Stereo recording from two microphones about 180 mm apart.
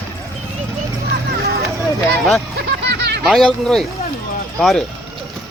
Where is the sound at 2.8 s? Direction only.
65° right (ahead or behind).